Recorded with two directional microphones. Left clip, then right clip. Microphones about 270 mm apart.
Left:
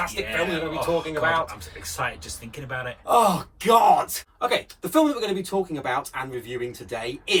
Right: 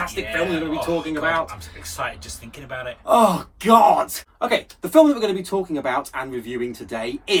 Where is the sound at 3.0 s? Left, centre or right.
Centre.